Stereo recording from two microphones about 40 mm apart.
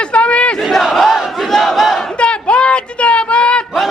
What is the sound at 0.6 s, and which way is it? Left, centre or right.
Battle cry, centre.